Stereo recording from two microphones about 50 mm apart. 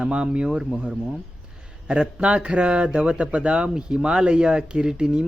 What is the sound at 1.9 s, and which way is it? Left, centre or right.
A man's voice, centre.